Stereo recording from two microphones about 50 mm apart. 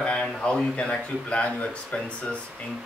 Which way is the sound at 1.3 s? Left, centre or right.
Left.